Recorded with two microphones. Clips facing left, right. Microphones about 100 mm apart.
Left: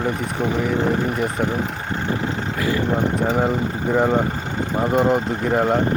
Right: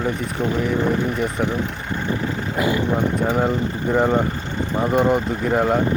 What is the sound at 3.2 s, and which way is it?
Speech, centre (ahead or behind).